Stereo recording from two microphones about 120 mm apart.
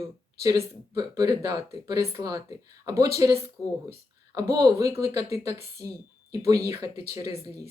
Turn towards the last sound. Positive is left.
turn(degrees=-30)  # may be behind; listen again after turning